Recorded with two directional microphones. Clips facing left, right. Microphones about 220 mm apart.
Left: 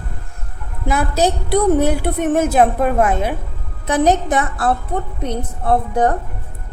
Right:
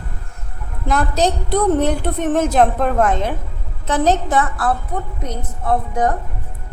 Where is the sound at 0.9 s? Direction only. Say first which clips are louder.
Left 1 dB; 10° left (ahead or behind); by 6.2 s 30° left (ahead or behind).